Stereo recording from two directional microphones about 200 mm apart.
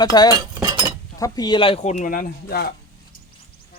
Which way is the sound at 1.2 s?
20° left (ahead or behind).